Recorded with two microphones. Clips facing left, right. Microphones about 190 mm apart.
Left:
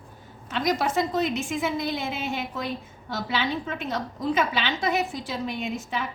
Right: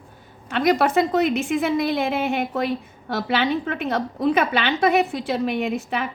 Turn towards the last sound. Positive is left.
turn(degrees=-60)  # may be behind; listen again after turning